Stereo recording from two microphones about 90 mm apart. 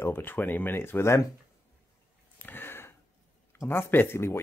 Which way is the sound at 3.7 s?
25° left (ahead or behind).